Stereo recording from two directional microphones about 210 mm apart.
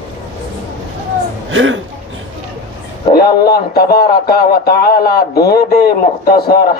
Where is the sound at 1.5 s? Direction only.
65° right (ahead or behind).